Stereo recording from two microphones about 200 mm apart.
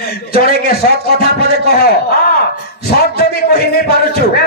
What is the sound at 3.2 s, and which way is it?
Speech, 50° left (ahead or behind).